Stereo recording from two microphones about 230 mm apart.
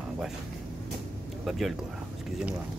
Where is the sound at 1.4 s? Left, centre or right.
Centre.